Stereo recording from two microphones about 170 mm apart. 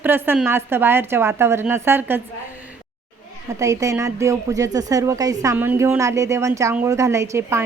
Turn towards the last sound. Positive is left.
turn(degrees=-15)  # may be behind; listen again after turning